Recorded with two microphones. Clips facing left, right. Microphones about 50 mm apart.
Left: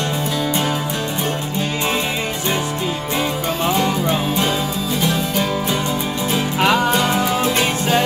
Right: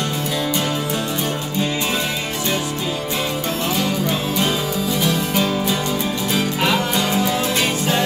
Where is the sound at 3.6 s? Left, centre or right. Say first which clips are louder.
Left 4 dB; left.